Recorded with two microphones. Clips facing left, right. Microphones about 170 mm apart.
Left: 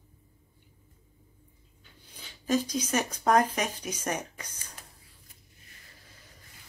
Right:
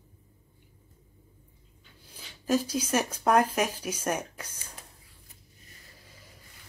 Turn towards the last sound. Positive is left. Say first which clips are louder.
# right 2 dB
turn(degrees=-10)  # may be behind; listen again after turning